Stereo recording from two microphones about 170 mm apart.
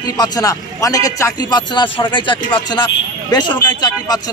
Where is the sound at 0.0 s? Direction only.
20° left (ahead or behind).